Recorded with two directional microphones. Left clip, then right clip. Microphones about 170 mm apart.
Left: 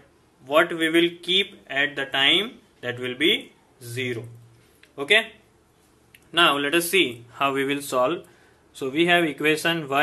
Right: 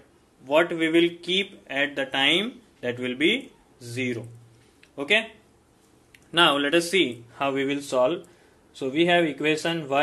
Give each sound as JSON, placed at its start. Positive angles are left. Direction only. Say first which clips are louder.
{"t": 0.5, "sound": "speech", "louder": "left 1 dB", "side_deg": -10}
{"t": 7.3, "sound": "speech", "louder": "left 3 dB", "side_deg": 0}